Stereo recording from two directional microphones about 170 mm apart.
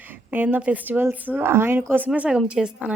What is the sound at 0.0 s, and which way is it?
A woman's voice, 10° right (ahead or behind).